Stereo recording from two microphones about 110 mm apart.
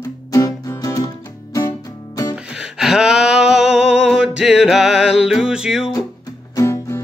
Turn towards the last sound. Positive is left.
turn(degrees=25)  # may be behind; listen again after turning